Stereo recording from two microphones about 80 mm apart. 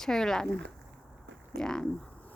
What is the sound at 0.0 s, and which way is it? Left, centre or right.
Speech, centre.